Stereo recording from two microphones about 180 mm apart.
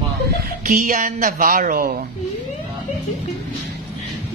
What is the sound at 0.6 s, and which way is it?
Speech, 50° right (ahead or behind).